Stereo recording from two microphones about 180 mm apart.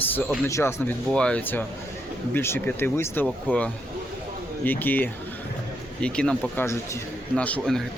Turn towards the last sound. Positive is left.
turn(degrees=5)  # may be behind; listen again after turning